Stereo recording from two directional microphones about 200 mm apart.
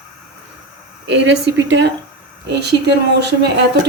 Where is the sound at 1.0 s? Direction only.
60° right (ahead or behind).